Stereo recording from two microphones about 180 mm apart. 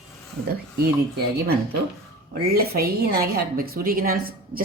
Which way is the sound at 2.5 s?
60° right (ahead or behind).